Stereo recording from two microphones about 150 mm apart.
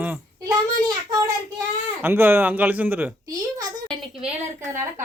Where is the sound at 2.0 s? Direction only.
15° right (ahead or behind).